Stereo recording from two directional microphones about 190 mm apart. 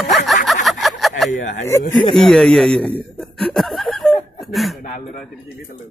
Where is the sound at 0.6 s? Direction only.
Centre (ahead or behind).